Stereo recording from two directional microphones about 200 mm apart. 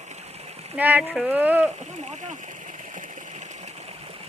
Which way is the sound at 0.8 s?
10° right (ahead or behind).